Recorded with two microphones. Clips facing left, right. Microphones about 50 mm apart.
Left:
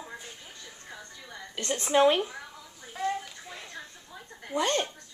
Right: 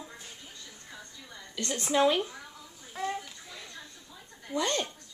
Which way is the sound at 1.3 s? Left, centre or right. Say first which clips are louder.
Left 2 dB; left.